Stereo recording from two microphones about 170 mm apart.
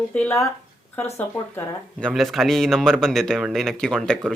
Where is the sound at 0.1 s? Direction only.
15° left (ahead or behind).